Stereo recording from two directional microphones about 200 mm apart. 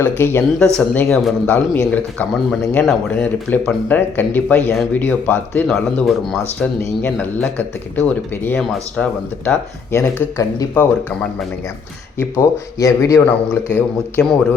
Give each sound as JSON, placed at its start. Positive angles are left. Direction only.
{"t": 0.0, "sound": "speech", "side_deg": 10}
{"t": 12.4, "sound": "speech", "side_deg": 15}
{"t": 13.7, "sound": "speech", "side_deg": 5}